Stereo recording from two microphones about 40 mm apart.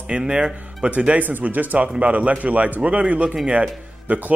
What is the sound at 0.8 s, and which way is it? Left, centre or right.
A man's voice, right.